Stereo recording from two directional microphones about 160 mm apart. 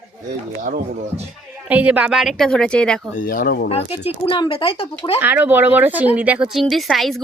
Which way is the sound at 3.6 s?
40° left (ahead or behind).